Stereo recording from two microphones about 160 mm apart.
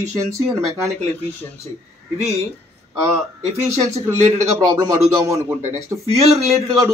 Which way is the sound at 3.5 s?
20° right (ahead or behind).